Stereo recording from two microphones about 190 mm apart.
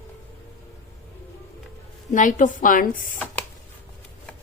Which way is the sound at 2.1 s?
45° left (ahead or behind).